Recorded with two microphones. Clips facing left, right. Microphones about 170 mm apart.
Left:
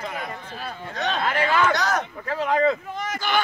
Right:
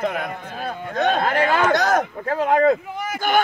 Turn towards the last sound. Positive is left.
turn(degrees=-10)  # may be behind; listen again after turning